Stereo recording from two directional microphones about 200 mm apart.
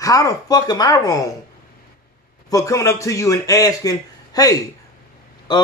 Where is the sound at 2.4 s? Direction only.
15° left (ahead or behind).